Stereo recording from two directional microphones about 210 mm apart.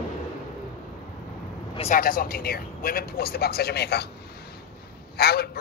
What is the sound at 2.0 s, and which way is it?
Speech, 45° left (ahead or behind).